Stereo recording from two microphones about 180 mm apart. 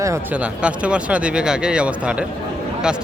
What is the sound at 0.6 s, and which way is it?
A man's voice, 5° right (ahead or behind).